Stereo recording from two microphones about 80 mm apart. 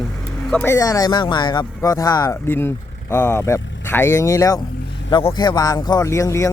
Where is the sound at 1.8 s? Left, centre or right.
Left.